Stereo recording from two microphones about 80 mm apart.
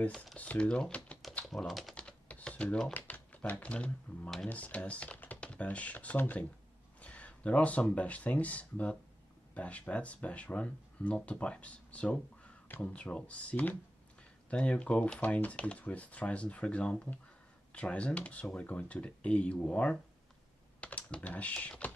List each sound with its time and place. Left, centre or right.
0.1 s speech: centre
0.4 s speech: centre
1.7 s speech: centre
2.0 s typing: centre
2.9 s speech: left